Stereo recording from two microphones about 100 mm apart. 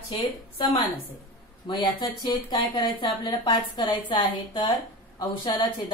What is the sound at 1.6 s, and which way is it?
Speech, 50° left (ahead or behind).